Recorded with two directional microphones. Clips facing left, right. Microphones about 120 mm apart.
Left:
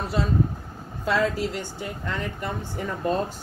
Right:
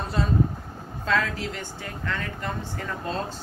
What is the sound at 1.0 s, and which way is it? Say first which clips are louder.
Speech: left 3 dB; 15° left (ahead or behind).